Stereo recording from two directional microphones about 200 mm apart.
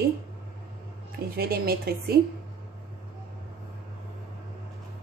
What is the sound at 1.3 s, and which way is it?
Speech, 50° right (ahead or behind).